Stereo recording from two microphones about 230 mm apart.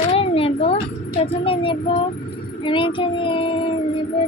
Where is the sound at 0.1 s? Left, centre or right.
Left.